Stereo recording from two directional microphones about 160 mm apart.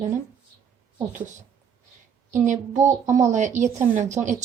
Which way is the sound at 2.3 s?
50° right (ahead or behind).